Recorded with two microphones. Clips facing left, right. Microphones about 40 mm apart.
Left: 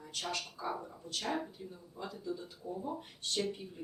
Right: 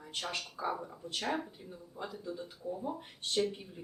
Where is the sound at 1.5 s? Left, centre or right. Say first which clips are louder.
Left 1 dB; centre.